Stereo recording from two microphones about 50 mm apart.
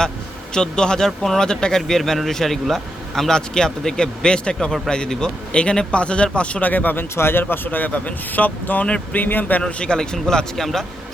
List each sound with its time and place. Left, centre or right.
0.5 s a man's voice: centre; by 7.0 s left
7.2 s speech: left; by 10.8 s centre